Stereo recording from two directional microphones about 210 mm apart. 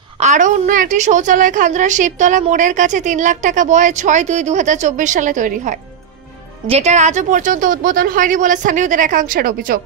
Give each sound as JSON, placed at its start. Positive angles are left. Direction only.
{"t": 0.2, "sound": "a woman's voice", "side_deg": -35}